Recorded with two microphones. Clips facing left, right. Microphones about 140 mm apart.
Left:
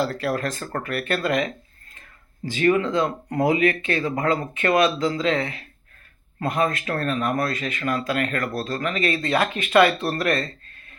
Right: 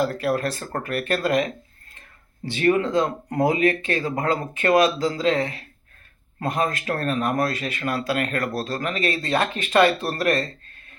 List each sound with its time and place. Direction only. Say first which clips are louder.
0.3 s speech: right 1 dB; 30° right (ahead or behind)